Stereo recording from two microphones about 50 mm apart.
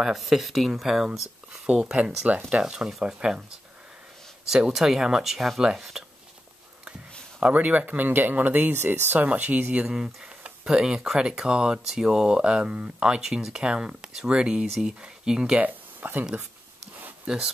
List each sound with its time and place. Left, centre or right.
0.0 s speech: centre
2.3 s speech: right
4.5 s speech: centre
7.3 s speech: right
8.7 s speech: right
9.2 s speech: right
9.8 s speech: centre
13.2 s speech: centre
15.6 s speech: right
17.3 s speech: right